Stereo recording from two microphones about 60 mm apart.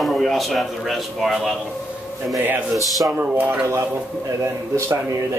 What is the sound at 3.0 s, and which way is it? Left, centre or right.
Speech, right.